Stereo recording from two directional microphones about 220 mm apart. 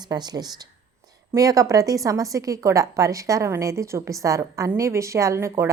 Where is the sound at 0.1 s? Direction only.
20° right (ahead or behind).